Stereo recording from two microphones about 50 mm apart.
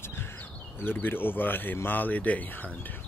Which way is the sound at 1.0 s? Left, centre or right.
Left.